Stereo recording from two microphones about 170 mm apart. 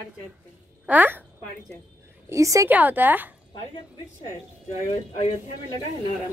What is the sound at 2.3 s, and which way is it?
A woman's voice, 20° right (ahead or behind).